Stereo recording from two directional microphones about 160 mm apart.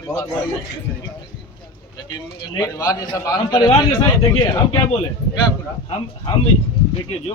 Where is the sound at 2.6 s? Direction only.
20° left (ahead or behind).